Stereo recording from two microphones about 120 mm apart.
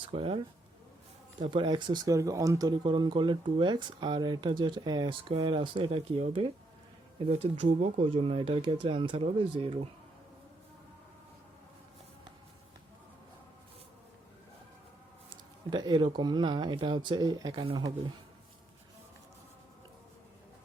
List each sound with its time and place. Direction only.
0.0 s speech: 50° right (ahead or behind)
7.3 s speech: 70° right (ahead or behind)
8.0 s speech: 50° right (ahead or behind)
15.7 s speech: 40° right (ahead or behind)